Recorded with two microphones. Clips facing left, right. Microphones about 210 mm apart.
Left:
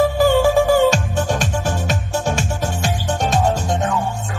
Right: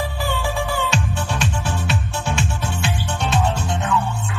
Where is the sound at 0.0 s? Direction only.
45° left (ahead or behind).